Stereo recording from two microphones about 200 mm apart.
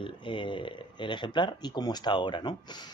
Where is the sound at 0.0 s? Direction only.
25° left (ahead or behind).